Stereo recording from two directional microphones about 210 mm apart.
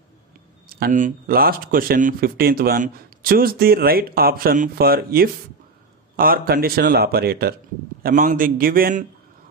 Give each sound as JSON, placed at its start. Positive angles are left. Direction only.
{"t": 0.7, "sound": "speech", "side_deg": -45}